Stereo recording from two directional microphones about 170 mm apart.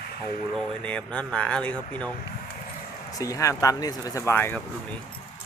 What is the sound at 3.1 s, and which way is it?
Speech, 20° left (ahead or behind).